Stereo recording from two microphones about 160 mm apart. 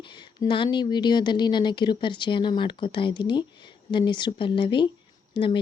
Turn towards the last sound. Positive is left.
turn(degrees=30)  # may be behind; listen again after turning